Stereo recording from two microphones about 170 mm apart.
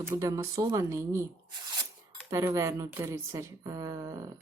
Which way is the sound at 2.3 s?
20° right (ahead or behind).